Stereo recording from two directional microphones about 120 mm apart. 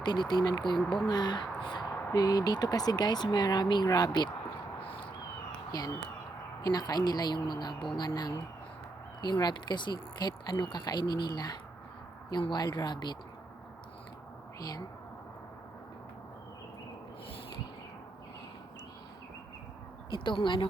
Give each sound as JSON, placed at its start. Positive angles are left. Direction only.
{"t": 0.0, "sound": "speech", "side_deg": 35}
{"t": 5.7, "sound": "speech", "side_deg": 35}
{"t": 14.6, "sound": "speech", "side_deg": 35}
{"t": 20.1, "sound": "speech", "side_deg": 45}